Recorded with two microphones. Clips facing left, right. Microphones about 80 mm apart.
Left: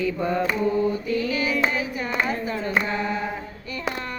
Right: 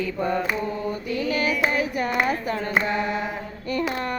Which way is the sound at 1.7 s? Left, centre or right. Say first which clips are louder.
Right 3 dB; right.